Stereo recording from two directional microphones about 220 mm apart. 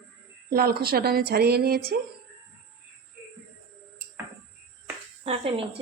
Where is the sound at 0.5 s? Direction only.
45° right (ahead or behind).